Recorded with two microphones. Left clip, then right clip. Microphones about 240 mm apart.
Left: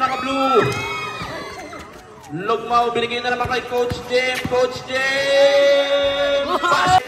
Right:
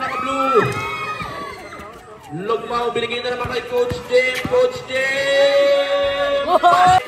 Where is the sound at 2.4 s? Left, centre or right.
Left.